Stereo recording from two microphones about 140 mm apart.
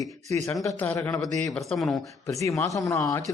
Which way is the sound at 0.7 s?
10° left (ahead or behind).